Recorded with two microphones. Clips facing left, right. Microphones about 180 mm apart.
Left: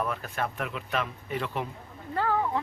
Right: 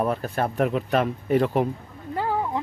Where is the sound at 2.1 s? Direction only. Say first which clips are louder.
Right 1 dB; 15° right (ahead or behind).